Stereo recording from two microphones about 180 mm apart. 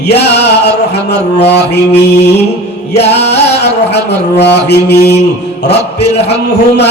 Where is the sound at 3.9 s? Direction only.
70° left (ahead or behind).